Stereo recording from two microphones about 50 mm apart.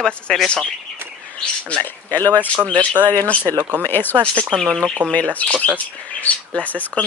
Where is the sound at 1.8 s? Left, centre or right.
Left.